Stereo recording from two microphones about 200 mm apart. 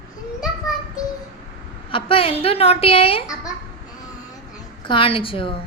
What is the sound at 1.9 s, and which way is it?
A woman's voice, 25° left (ahead or behind).